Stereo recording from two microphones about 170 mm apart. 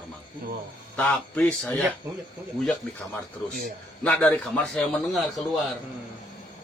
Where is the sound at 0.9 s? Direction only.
10° left (ahead or behind).